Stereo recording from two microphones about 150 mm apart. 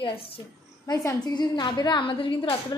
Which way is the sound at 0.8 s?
25° left (ahead or behind).